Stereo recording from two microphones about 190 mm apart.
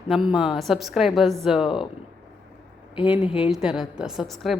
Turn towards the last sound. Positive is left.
turn(degrees=0)  # may be behind; listen again after turning